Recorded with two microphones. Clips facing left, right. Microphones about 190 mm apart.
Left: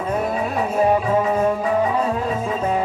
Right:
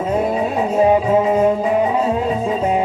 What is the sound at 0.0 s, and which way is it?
Music, 20° right (ahead or behind).